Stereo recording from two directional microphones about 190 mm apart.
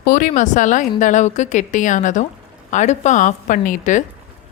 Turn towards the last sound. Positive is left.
turn(degrees=40)  # may be behind; listen again after turning